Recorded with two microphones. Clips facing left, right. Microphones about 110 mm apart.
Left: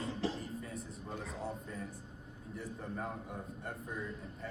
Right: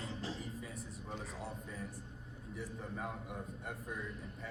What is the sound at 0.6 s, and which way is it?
Speech, centre (ahead or behind).